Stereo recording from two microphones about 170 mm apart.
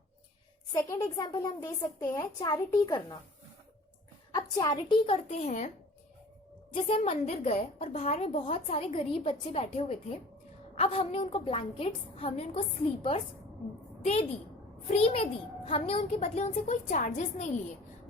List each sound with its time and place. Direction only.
0.7 s a woman's voice: 20° left (ahead or behind)
4.5 s a woman's voice: 25° left (ahead or behind); by 5.7 s 45° left (ahead or behind)
6.7 s a woman's voice: 35° left (ahead or behind)